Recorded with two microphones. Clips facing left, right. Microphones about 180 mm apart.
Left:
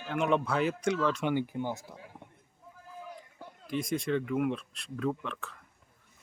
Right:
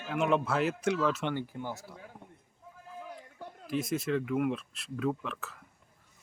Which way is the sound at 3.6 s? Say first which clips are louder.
Even; 5° right (ahead or behind).